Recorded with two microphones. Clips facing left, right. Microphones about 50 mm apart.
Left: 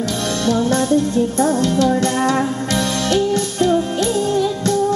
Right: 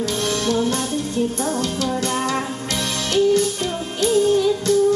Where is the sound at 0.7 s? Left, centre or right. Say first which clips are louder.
Left 7 dB; left.